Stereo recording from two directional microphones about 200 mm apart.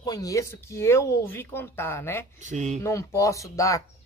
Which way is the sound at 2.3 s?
35° right (ahead or behind).